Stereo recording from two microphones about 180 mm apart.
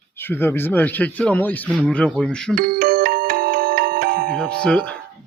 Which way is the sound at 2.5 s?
55° right (ahead or behind).